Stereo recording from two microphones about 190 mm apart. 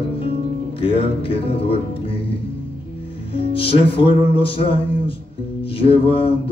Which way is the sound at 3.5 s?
30° left (ahead or behind).